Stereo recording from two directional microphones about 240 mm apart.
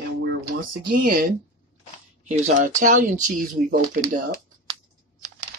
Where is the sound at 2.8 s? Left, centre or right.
Right.